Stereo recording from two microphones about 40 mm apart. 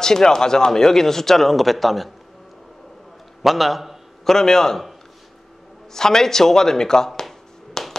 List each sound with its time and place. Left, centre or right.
0.0 s speech: centre
3.4 s a sound: centre
4.3 s speech: centre
5.9 s speech: centre
7.8 s finger snapping: centre